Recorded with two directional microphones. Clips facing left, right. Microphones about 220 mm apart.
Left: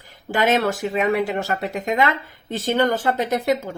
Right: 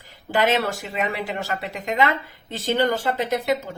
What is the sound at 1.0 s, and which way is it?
Speech, 45° left (ahead or behind).